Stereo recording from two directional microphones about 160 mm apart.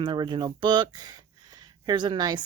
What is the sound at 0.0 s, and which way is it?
Speech, 30° right (ahead or behind).